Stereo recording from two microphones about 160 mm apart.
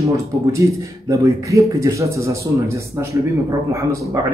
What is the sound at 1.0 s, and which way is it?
Speech, 20° right (ahead or behind).